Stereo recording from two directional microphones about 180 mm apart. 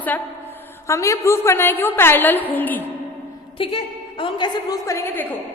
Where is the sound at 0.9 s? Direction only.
15° left (ahead or behind).